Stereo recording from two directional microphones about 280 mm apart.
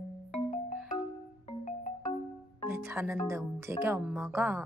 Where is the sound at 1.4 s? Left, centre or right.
Left.